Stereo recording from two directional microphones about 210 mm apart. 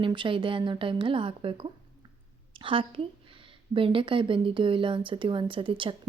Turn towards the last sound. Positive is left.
turn(degrees=-25)  # may be behind; listen again after turning